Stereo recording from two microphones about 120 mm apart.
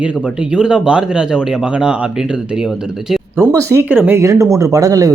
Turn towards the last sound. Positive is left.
turn(degrees=-30)  # may be behind; listen again after turning